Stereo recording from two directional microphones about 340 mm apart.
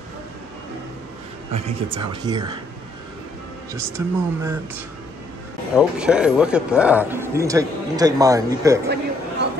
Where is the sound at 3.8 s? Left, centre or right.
Centre.